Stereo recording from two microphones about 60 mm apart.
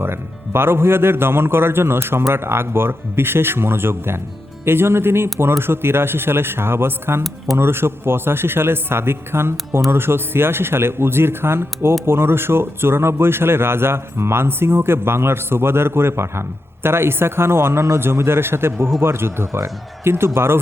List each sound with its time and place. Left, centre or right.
0.0 s speech: right